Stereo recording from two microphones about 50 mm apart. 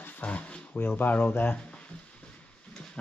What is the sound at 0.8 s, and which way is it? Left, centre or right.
Speech, left.